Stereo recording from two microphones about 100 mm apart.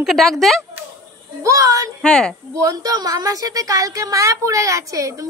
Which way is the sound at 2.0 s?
5° left (ahead or behind).